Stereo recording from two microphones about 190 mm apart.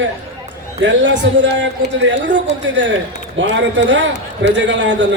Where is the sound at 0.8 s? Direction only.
75° right (ahead or behind).